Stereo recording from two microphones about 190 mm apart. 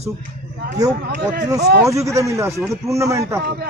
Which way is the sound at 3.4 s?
55° right (ahead or behind).